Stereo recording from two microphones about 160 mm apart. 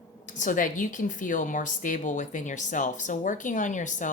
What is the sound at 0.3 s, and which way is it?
A woman's voice, 55° left (ahead or behind).